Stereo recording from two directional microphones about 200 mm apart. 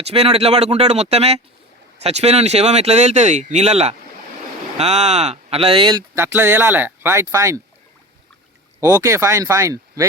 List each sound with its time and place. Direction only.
0.0 s speech: 30° right (ahead or behind); by 7.6 s 15° right (ahead or behind)
8.8 s speech: 15° right (ahead or behind)